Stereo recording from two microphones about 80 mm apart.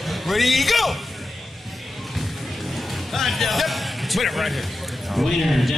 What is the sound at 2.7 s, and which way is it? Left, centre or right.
A man's voice, centre.